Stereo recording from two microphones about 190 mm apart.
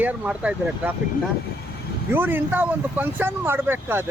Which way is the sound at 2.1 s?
10° right (ahead or behind).